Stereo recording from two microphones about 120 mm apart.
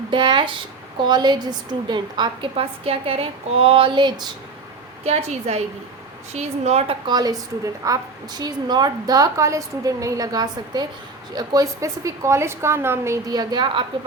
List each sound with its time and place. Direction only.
0.1 s a woman's voice: 45° right (ahead or behind)
5.0 s a woman's voice: 65° right (ahead or behind)
7.1 s a woman's voice: 35° right (ahead or behind)
13.2 s a woman's voice: 35° right (ahead or behind)